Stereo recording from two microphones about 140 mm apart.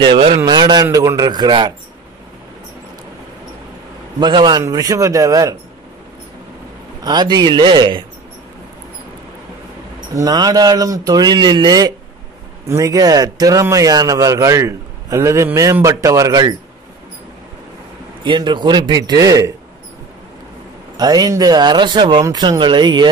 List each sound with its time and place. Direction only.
0.0 s a man's voice: 35° right (ahead or behind)
4.2 s speech: 30° right (ahead or behind)
7.0 s a man's voice: 30° right (ahead or behind)
10.1 s speech: 30° right (ahead or behind)
18.2 s a man's voice: 35° right (ahead or behind)
21.0 s a man's voice: 30° right (ahead or behind)